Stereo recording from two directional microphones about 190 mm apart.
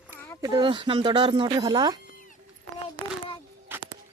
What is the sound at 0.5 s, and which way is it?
Speech, 25° right (ahead or behind).